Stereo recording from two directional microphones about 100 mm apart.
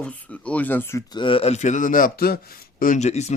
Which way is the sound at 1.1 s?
55° left (ahead or behind).